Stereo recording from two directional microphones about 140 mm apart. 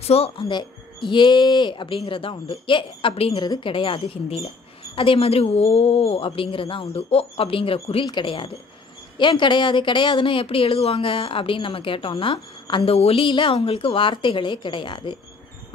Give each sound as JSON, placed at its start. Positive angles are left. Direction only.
{"t": 0.0, "sound": "a woman's voice", "side_deg": 45}